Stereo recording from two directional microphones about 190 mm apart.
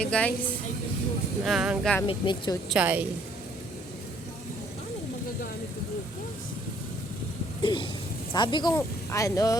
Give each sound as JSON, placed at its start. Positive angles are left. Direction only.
{"t": 0.0, "sound": "a woman's voice", "side_deg": 5}
{"t": 1.5, "sound": "speech", "side_deg": -5}
{"t": 2.0, "sound": "speech", "side_deg": 25}
{"t": 2.6, "sound": "a woman's voice", "side_deg": -5}
{"t": 7.6, "sound": "speech", "side_deg": 25}